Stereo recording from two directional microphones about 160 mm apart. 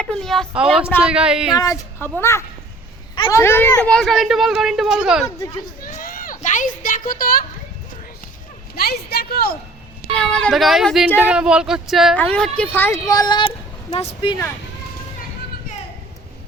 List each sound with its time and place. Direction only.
0.0 s speech: 5° left (ahead or behind)
1.5 s a woman's voice: 20° left (ahead or behind); by 5.3 s centre (ahead or behind)
5.8 s a sound: 60° left (ahead or behind)
8.7 s a woman's voice: 80° left
10.2 s speech: 5° left (ahead or behind)
12.1 s a woman's voice: 10° left (ahead or behind); by 14.3 s 35° left (ahead or behind)